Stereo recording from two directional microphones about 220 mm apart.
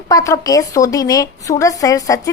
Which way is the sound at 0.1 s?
15° left (ahead or behind).